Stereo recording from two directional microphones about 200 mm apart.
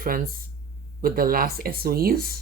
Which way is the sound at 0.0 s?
45° right (ahead or behind).